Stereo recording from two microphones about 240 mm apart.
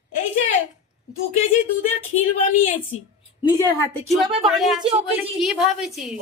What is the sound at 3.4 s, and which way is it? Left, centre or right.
Speech, centre.